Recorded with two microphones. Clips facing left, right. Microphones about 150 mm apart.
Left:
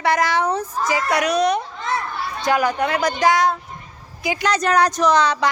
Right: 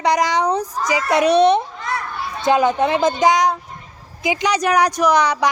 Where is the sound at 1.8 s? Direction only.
25° left (ahead or behind).